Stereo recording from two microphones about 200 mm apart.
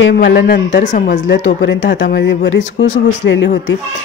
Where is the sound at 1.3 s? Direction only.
60° left (ahead or behind).